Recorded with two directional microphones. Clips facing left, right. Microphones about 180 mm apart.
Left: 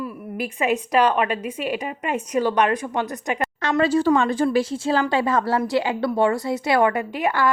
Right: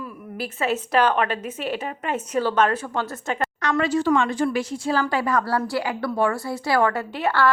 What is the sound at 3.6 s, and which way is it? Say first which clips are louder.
A woman's voice: left 3 dB; 30° left (ahead or behind).